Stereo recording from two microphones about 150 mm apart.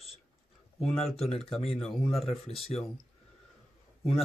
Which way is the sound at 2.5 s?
40° left (ahead or behind).